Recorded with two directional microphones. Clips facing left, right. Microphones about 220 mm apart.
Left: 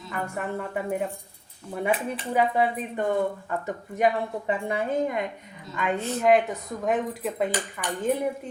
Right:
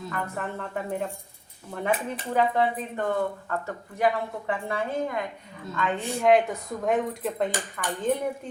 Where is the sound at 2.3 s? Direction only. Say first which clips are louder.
Even; 10° left (ahead or behind).